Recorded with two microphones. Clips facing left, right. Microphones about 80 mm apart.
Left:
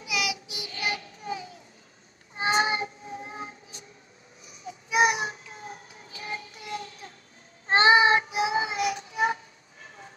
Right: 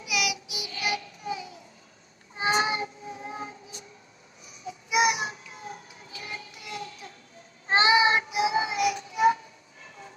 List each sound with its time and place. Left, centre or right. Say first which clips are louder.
0.0 s child singing: right 1 dB; left
2.4 s a sound: left 1 dB; left
4.6 s baby cry: left 1 dB; left
6.1 s music: left 3 dB; left
7.8 s child singing: left 2 dB; left